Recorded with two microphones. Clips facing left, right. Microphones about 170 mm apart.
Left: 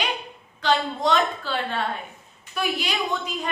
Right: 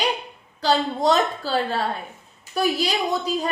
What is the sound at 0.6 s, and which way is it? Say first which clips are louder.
A woman's voice: right 3 dB; 35° right (ahead or behind).